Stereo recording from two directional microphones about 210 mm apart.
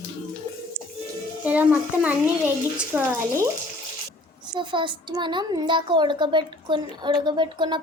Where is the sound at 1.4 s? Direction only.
5° right (ahead or behind).